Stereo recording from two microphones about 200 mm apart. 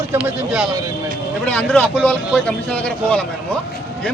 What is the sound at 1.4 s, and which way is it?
A man's voice, 5° left (ahead or behind).